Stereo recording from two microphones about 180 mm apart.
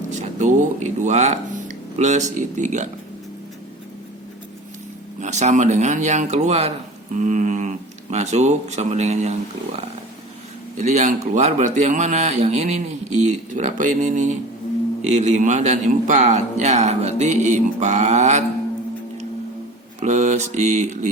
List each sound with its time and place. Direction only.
0.1 s speech: 45° right (ahead or behind)
5.2 s speech: 40° right (ahead or behind)
10.8 s speech: 40° right (ahead or behind)
20.0 s speech: 40° right (ahead or behind)